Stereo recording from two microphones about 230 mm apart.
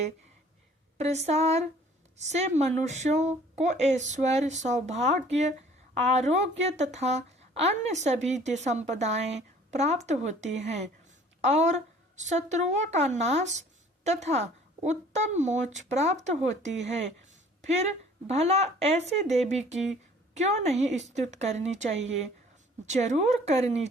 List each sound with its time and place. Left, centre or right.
0.9 s a woman's voice: right